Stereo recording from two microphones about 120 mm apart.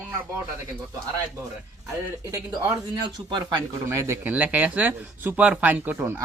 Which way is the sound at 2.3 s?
30° right (ahead or behind).